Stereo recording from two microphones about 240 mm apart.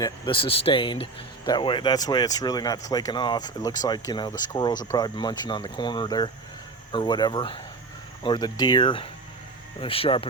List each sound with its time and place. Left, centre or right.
0.0 s speech: left